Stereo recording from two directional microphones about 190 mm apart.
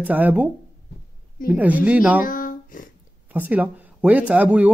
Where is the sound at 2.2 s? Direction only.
45° left (ahead or behind).